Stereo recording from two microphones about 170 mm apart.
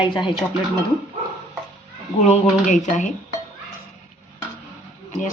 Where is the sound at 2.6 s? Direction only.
45° left (ahead or behind).